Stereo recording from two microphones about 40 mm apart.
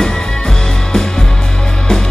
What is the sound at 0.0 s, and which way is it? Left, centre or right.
Music, centre.